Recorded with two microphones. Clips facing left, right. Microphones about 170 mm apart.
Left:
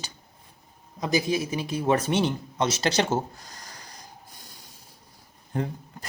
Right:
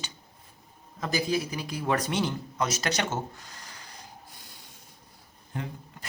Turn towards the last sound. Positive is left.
turn(degrees=40)  # may be behind; listen again after turning